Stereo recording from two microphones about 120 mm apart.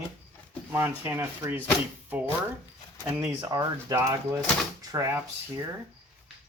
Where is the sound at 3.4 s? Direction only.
30° right (ahead or behind).